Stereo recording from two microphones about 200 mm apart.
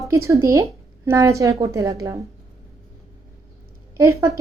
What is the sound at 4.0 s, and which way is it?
Speech, 15° right (ahead or behind).